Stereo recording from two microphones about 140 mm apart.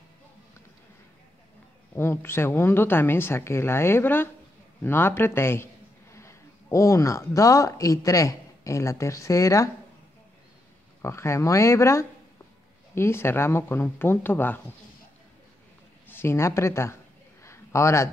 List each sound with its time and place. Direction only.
2.0 s a woman's voice: 15° left (ahead or behind)
11.0 s a woman's voice: 20° left (ahead or behind)
16.1 s speech: 15° left (ahead or behind)
17.4 s a sound: 20° left (ahead or behind)